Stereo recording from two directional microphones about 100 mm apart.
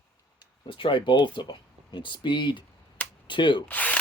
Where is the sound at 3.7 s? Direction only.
15° left (ahead or behind).